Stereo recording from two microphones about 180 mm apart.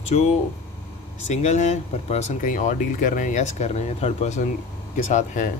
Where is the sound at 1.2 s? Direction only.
40° left (ahead or behind).